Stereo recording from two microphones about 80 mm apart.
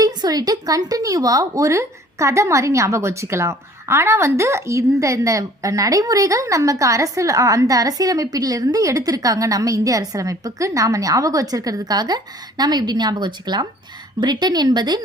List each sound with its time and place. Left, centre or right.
0.0 s speech: right